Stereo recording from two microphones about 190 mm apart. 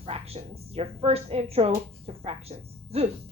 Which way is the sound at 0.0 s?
30° right (ahead or behind).